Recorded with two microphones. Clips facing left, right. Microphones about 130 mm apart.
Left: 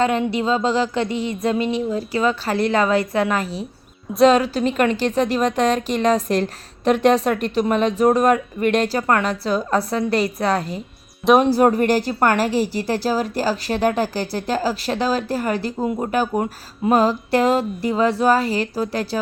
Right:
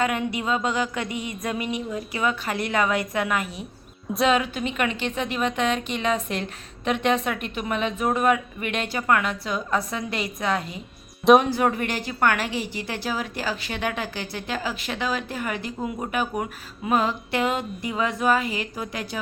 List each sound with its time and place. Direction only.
0.0 s a woman's voice: 30° left (ahead or behind)